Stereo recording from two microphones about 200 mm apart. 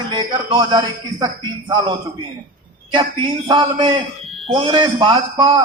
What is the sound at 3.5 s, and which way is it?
A man's voice, 20° right (ahead or behind).